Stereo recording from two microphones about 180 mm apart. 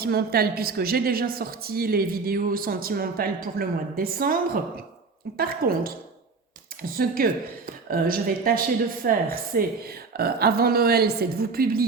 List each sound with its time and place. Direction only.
0.0 s a woman's voice: 60° right (ahead or behind)
5.4 s a woman's voice: 55° right (ahead or behind)